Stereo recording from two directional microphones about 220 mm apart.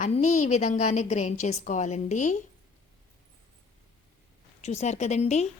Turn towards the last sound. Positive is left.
turn(degrees=30)  # may be behind; listen again after turning